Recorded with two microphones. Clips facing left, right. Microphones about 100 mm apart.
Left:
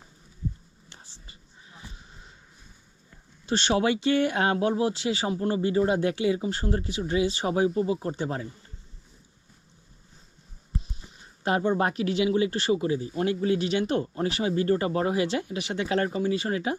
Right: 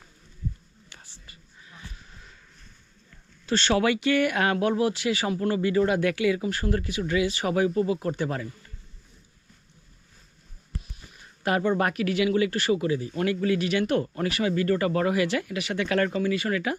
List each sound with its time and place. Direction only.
1.0 s a sound: 20° left (ahead or behind)
3.4 s speech: 20° left (ahead or behind)
10.7 s speech: 25° left (ahead or behind)